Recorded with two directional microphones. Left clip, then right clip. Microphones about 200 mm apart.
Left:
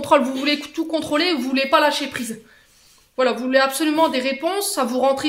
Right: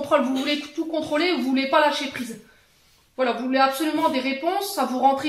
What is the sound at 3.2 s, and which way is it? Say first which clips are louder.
Speech: left 3 dB; 55° left (ahead or behind).